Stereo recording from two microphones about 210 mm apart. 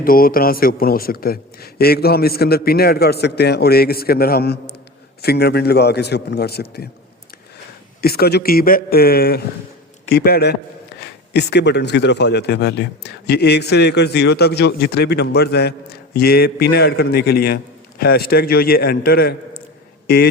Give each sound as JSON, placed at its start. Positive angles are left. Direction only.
{"t": 0.0, "sound": "a man's voice", "side_deg": 45}
{"t": 8.0, "sound": "a man's voice", "side_deg": 50}